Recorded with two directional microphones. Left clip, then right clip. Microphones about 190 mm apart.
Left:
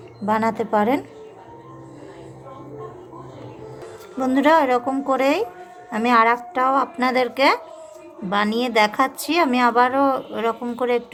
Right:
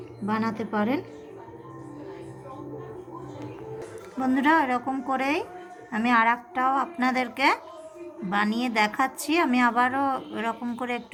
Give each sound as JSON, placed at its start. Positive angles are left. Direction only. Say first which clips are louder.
{"t": 0.3, "sound": "a woman's voice", "louder": "left 9 dB", "side_deg": 45}
{"t": 4.2, "sound": "a woman's voice", "louder": "left 6 dB", "side_deg": 30}